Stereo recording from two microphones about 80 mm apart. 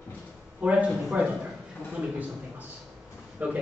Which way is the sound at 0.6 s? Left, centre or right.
Centre.